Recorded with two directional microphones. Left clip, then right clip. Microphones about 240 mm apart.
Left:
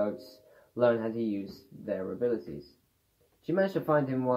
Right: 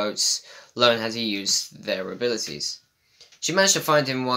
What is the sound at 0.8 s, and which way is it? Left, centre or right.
Speech, right.